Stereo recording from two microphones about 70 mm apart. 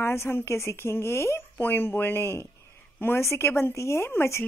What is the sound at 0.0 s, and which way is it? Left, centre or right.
A woman's voice, left.